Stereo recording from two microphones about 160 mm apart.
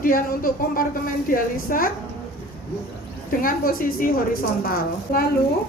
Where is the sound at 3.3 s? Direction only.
60° left (ahead or behind).